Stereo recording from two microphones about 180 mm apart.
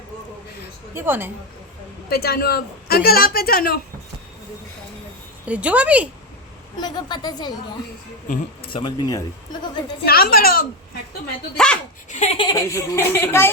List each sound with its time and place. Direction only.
0.9 s speech: 10° right (ahead or behind)
2.0 s a woman's voice: 60° left (ahead or behind)
5.5 s speech: 5° right (ahead or behind)
6.7 s a woman's voice: 25° left (ahead or behind)
8.7 s a woman's voice: 20° left (ahead or behind)
10.1 s a woman's voice: 55° left (ahead or behind)
11.5 s speech: 5° left (ahead or behind)
12.1 s speech: 35° left (ahead or behind)
12.5 s speech: 20° left (ahead or behind)